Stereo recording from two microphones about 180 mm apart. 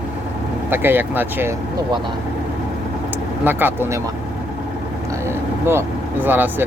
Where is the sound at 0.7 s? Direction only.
10° right (ahead or behind).